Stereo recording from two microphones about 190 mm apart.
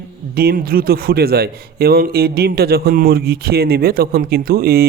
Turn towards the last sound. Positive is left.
turn(degrees=-55)  # may be behind; listen again after turning